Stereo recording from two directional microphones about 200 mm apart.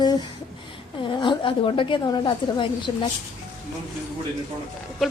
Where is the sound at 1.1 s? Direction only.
25° left (ahead or behind).